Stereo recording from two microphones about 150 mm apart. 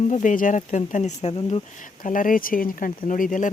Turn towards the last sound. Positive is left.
turn(degrees=60)  # may be behind; listen again after turning